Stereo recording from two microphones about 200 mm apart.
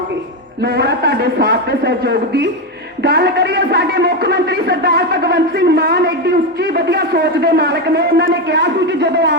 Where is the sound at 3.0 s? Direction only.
55° right (ahead or behind).